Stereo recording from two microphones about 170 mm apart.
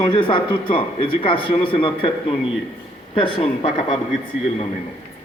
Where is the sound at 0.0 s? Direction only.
30° left (ahead or behind).